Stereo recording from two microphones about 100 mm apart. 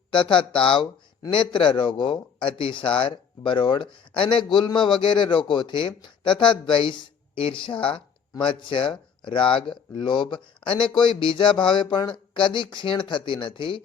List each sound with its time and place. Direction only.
0.1 s speech: 55° left (ahead or behind)